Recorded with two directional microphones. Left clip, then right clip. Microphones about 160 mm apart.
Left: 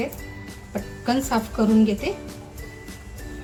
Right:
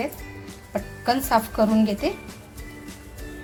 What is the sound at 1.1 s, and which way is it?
Speech, 50° right (ahead or behind).